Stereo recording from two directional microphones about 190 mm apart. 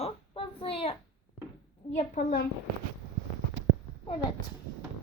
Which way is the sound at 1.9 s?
45° left (ahead or behind).